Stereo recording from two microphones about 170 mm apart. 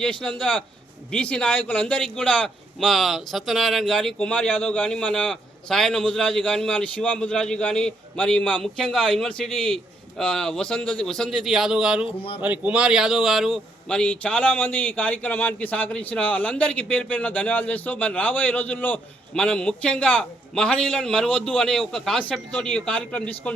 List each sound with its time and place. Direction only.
0.0 s a man's voice: 5° left (ahead or behind)
12.0 s a man's voice: 35° left (ahead or behind)
12.4 s a man's voice: 10° right (ahead or behind); by 23.3 s 5° left (ahead or behind)